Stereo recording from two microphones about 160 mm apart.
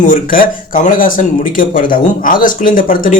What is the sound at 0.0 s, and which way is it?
A man's voice, 55° left (ahead or behind).